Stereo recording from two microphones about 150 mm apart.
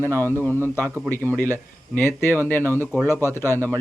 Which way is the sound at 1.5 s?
15° left (ahead or behind).